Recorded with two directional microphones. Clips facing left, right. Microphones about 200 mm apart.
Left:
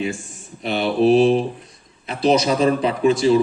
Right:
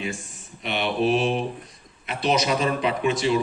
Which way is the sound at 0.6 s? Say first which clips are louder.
Left 6 dB; 35° left (ahead or behind).